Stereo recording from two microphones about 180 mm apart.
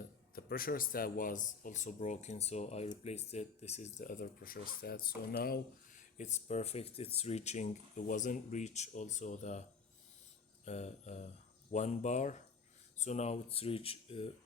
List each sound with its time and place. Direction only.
0.3 s speech: 55° left (ahead or behind)
10.7 s speech: 40° left (ahead or behind)